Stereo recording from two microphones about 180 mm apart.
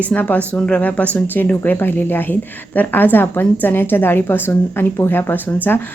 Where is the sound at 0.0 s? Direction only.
10° left (ahead or behind).